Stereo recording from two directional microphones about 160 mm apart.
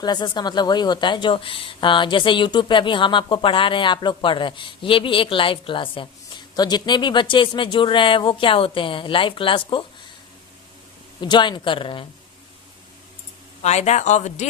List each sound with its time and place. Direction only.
0.0 s speech: 25° left (ahead or behind)
11.2 s speech: 30° left (ahead or behind)
13.6 s speech: 45° left (ahead or behind)